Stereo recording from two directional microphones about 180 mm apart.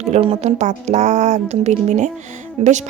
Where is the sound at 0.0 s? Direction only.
35° right (ahead or behind).